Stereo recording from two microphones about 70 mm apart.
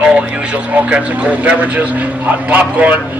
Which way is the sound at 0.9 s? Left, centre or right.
Centre.